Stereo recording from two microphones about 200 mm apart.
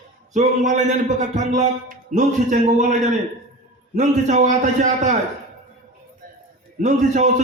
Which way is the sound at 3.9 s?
40° right (ahead or behind).